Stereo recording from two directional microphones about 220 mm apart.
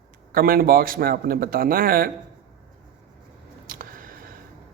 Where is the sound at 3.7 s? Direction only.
40° right (ahead or behind).